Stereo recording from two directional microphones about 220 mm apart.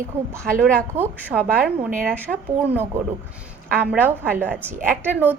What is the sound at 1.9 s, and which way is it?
Speech, 40° right (ahead or behind).